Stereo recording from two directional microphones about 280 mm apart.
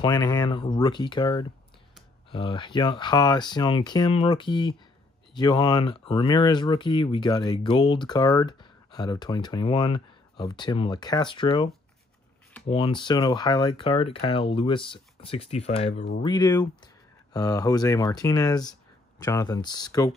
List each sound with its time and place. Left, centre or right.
0.0 s speech: centre
15.9 s speech: left
16.2 s speech: centre